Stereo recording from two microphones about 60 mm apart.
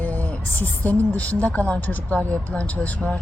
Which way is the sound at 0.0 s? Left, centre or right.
Left.